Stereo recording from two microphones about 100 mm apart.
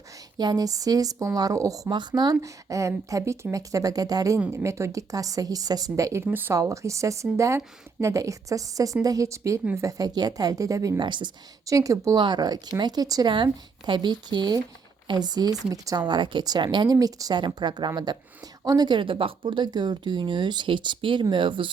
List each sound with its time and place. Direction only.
0.3 s a woman's voice: 40° right (ahead or behind)
1.9 s a woman's voice: 45° right (ahead or behind)
6.2 s speech: 20° right (ahead or behind)
6.5 s a woman's voice: 30° right (ahead or behind)
11.0 s speech: 50° right (ahead or behind)
11.6 s a woman's voice: 35° right (ahead or behind)
12.2 s speech: 45° right (ahead or behind)
13.3 s speech: 55° right (ahead or behind)